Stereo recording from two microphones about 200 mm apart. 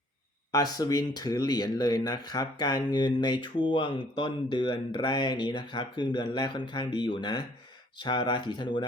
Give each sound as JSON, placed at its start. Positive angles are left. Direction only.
{"t": 0.5, "sound": "speech", "side_deg": 20}